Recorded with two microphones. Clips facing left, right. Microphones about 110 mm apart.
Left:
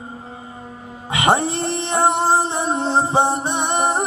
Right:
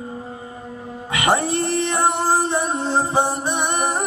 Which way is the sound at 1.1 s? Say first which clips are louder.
Left 2 dB; 20° left (ahead or behind).